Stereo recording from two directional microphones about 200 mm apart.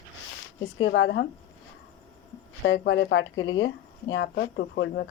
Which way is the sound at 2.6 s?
65° left (ahead or behind).